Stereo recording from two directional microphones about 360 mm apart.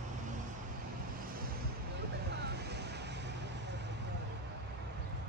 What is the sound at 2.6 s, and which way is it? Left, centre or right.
Waves, right.